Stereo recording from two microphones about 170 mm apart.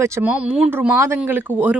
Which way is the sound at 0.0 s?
15° right (ahead or behind).